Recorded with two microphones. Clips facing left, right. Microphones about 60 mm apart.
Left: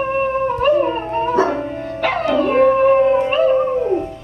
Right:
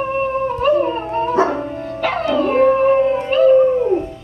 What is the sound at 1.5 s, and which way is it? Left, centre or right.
Music, centre.